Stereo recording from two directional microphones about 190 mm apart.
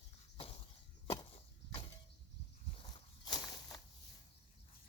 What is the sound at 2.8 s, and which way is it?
Walk, 25° left (ahead or behind).